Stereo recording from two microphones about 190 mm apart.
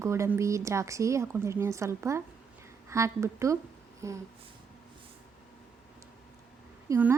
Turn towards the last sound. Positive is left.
turn(degrees=-10)  # may be behind; listen again after turning